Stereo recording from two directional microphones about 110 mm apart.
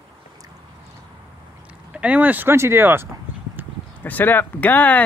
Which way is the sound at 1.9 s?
15° right (ahead or behind).